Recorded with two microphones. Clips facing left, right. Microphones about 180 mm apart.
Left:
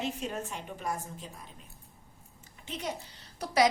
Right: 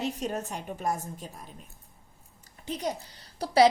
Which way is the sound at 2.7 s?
35° right (ahead or behind).